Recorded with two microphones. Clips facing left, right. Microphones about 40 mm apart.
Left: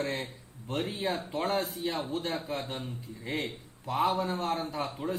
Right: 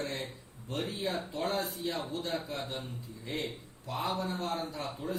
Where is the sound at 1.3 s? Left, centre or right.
Left.